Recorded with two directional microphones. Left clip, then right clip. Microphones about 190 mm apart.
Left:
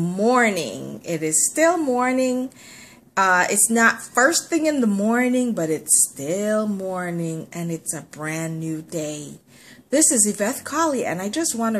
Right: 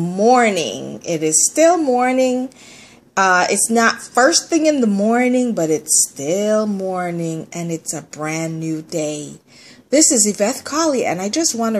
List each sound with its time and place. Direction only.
0.1 s a woman's voice: 10° right (ahead or behind)